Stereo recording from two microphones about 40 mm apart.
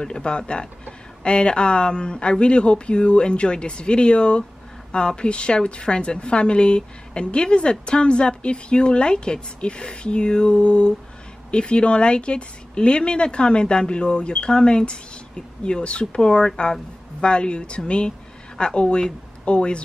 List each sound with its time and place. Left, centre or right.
0.0 s a woman's voice: left